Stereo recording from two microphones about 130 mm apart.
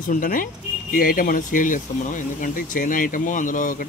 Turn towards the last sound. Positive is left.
turn(degrees=90)